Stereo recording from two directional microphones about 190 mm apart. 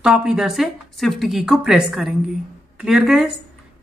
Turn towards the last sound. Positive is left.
turn(degrees=0)  # may be behind; listen again after turning